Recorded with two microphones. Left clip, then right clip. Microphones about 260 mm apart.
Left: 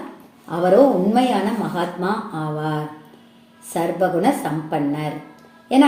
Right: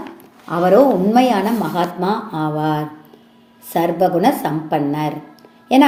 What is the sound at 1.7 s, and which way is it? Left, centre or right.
A woman's voice, right.